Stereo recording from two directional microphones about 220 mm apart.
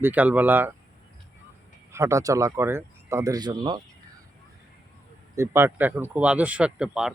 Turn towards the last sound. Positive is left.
turn(degrees=-5)  # may be behind; listen again after turning